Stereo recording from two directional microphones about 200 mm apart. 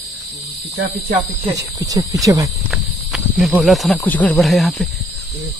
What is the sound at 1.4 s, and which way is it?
Speech, 15° right (ahead or behind).